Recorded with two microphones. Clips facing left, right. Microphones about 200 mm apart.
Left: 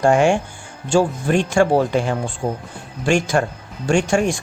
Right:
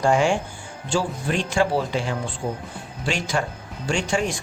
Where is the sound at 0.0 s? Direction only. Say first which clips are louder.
Left 4 dB; 55° left (ahead or behind).